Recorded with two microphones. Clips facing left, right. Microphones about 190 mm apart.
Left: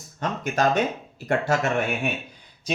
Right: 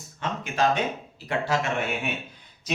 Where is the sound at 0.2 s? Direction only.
45° left (ahead or behind).